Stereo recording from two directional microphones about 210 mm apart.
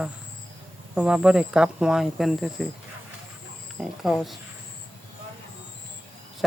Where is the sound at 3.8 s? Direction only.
Centre (ahead or behind).